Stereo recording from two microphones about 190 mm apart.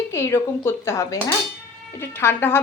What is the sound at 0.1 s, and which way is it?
A woman's voice, 15° left (ahead or behind).